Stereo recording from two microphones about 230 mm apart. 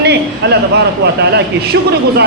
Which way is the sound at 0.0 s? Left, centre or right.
Right.